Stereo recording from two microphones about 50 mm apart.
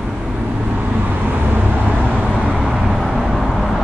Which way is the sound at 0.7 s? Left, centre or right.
Right.